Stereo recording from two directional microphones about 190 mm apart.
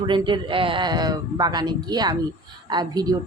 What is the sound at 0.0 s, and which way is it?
Speech, 25° right (ahead or behind).